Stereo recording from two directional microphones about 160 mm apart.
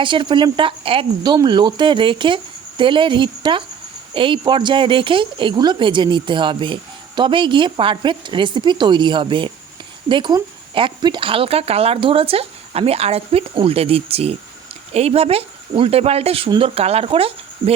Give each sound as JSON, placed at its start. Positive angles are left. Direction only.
{"t": 0.0, "sound": "speech", "side_deg": -30}